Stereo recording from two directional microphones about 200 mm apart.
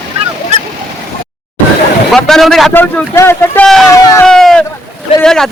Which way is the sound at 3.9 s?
15° left (ahead or behind).